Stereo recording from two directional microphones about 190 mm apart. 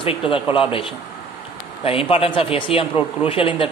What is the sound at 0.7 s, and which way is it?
Speech, 25° left (ahead or behind).